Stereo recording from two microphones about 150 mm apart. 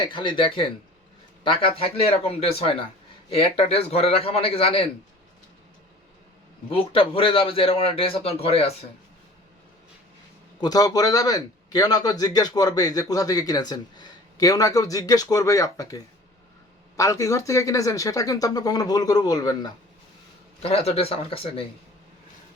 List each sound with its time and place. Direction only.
0.1 s a man's voice: 30° left (ahead or behind)
6.7 s a man's voice: 35° left (ahead or behind)
10.6 s a man's voice: 25° left (ahead or behind)
17.0 s a man's voice: 20° left (ahead or behind)
20.6 s a man's voice: 45° left (ahead or behind)